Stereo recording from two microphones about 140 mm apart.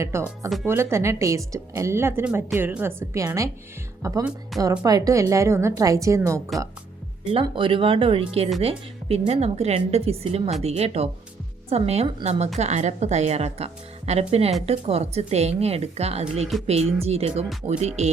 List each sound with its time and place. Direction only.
0.0 s a woman's voice: 20° right (ahead or behind)
4.2 s speech: 5° right (ahead or behind)
4.8 s a woman's voice: 25° right (ahead or behind)
7.4 s speech: 35° right (ahead or behind)